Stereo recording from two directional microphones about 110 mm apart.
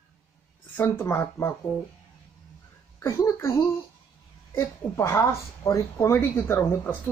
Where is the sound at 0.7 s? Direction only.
20° left (ahead or behind).